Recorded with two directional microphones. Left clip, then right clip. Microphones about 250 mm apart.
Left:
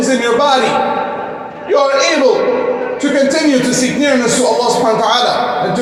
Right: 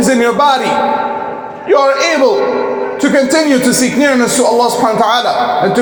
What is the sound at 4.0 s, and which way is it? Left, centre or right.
Speech, right.